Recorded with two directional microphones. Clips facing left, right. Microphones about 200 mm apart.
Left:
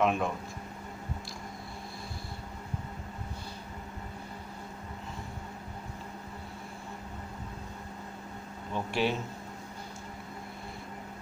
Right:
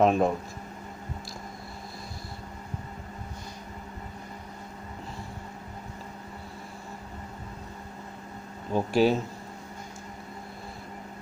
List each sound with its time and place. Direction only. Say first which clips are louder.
0.0 s speech: right 6 dB; 35° right (ahead or behind)
8.7 s speech: right 8 dB; 40° right (ahead or behind)